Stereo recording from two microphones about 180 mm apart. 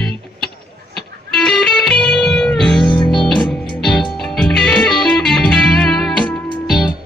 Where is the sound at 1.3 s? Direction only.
Centre (ahead or behind).